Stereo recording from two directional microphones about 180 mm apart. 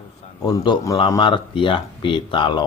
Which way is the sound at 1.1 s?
25° left (ahead or behind).